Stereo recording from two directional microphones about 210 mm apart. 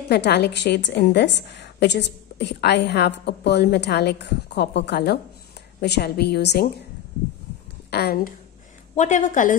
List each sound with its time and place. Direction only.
0.1 s a woman's voice: 50° left (ahead or behind)
7.9 s a woman's voice: 45° left (ahead or behind)
8.9 s a woman's voice: 35° left (ahead or behind)